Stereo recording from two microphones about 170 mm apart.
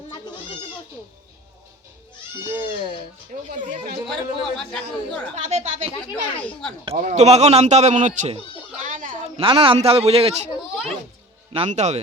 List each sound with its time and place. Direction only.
2.4 s speech: 15° right (ahead or behind)
3.3 s speech: 50° right (ahead or behind)
4.0 s speech: centre (ahead or behind)
5.3 s speech: 40° right (ahead or behind)
6.4 s speech: 5° left (ahead or behind)
6.9 s a man's voice: 50° right (ahead or behind)
8.8 s a sound: 50° right (ahead or behind)
9.4 s a man's voice: 30° right (ahead or behind)
10.6 s a child's voice: centre (ahead or behind)
11.5 s speech: 40° right (ahead or behind)